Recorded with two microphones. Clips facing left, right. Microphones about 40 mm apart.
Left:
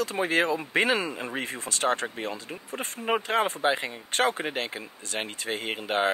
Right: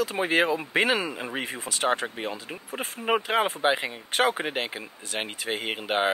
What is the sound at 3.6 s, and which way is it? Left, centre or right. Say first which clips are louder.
Speech: right 1 dB; right.